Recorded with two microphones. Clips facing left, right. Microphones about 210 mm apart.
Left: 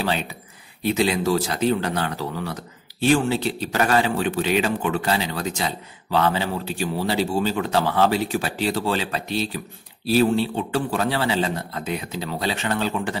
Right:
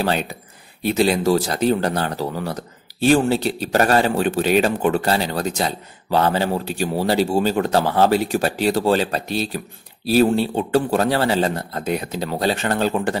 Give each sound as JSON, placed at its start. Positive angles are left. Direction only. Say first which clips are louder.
{"t": 0.0, "sound": "speech", "louder": "right 4 dB", "side_deg": -45}